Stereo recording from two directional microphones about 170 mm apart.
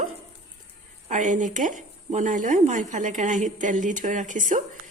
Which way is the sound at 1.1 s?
50° right (ahead or behind).